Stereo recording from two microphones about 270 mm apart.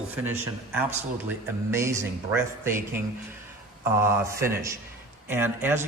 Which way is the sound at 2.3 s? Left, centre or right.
Centre.